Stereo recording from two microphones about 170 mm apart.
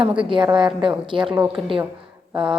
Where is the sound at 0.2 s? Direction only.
30° right (ahead or behind).